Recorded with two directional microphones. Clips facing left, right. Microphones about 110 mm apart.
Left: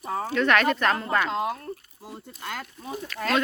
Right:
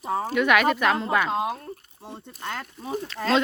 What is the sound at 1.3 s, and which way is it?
Speech, 20° right (ahead or behind).